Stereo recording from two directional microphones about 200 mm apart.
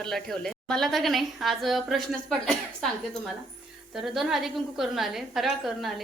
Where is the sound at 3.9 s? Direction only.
Centre (ahead or behind).